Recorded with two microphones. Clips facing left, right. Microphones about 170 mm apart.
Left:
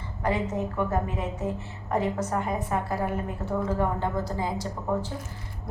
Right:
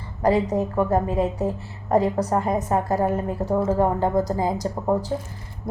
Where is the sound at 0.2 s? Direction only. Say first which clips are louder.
Right 7 dB; 35° right (ahead or behind).